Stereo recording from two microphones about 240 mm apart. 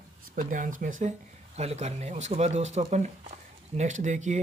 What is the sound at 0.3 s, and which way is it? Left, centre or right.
Speech, right.